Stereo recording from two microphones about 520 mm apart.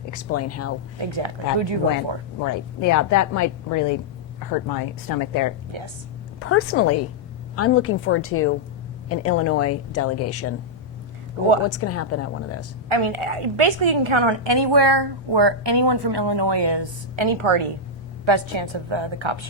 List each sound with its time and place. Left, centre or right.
0.1 s a woman's voice: left
0.9 s a woman's voice: right
2.4 s speech: left
5.7 s a woman's voice: right
6.4 s a woman's voice: left
11.6 s a woman's voice: left
12.9 s a woman's voice: right